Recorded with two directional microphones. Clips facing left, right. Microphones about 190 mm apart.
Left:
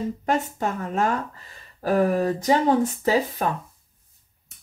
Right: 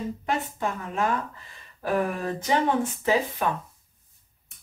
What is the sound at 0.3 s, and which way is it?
A woman's voice, 45° left (ahead or behind).